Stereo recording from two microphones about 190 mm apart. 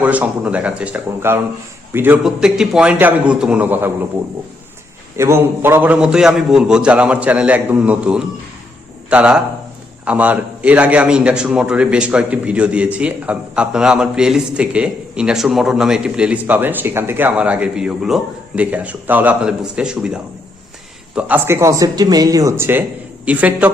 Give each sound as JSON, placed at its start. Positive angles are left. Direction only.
{"t": 0.0, "sound": "a man's voice", "side_deg": -5}
{"t": 5.1, "sound": "a man's voice", "side_deg": -15}